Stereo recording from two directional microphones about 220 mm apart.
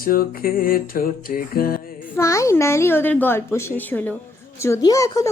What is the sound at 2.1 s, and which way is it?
A woman's voice, 15° left (ahead or behind).